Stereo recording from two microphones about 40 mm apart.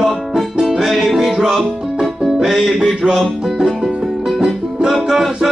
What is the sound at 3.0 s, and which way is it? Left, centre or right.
Music, right.